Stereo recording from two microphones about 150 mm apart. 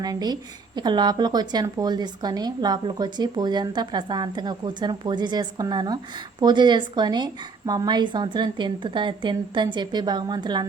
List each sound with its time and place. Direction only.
0.0 s a woman's voice: 25° right (ahead or behind)